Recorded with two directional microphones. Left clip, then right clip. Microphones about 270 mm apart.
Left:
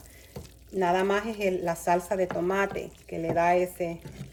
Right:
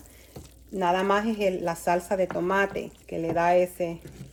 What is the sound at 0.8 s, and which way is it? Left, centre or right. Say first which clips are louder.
Speech: right 1 dB; right.